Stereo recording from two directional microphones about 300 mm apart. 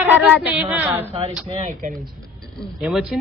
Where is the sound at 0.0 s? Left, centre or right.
Centre.